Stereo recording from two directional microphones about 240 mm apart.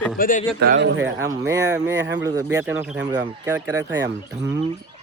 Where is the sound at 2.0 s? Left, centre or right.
Right.